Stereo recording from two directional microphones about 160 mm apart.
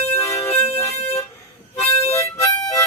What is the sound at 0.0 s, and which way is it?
Music, 15° left (ahead or behind).